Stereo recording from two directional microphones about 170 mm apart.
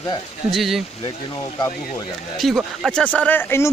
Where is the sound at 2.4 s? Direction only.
Centre (ahead or behind).